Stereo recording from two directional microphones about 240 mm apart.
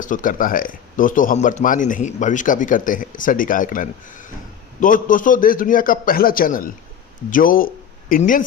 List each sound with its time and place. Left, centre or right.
0.0 s speech: left